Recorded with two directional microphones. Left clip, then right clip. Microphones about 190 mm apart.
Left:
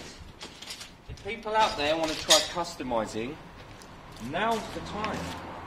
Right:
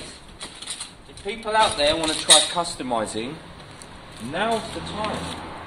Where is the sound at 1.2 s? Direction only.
40° right (ahead or behind).